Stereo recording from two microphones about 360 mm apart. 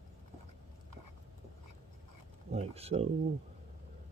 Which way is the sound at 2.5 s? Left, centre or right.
Centre.